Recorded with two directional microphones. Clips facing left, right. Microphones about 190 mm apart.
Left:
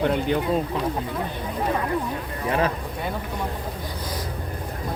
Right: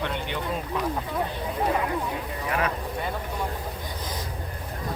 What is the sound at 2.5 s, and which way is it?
Speech, 30° left (ahead or behind).